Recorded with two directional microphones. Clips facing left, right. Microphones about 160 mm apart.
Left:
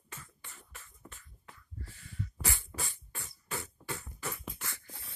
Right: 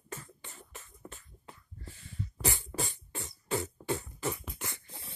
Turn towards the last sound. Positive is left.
turn(degrees=-25)  # may be behind; listen again after turning